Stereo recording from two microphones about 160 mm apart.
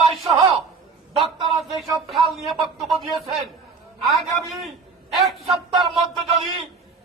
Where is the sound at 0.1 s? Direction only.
Centre (ahead or behind).